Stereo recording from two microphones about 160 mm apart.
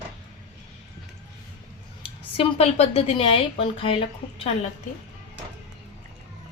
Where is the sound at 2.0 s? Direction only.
35° left (ahead or behind).